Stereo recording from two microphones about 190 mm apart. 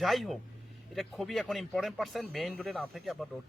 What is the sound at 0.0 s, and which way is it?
Speech, centre (ahead or behind).